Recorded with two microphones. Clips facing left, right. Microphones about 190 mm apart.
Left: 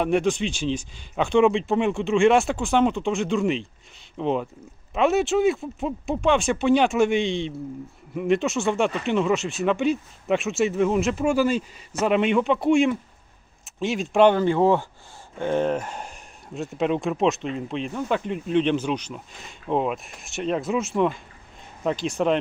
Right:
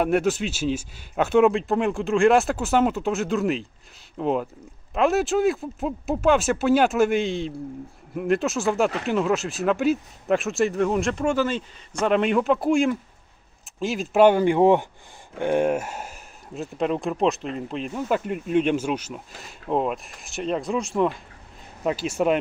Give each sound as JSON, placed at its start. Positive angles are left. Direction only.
{"t": 0.0, "sound": "speech", "side_deg": -5}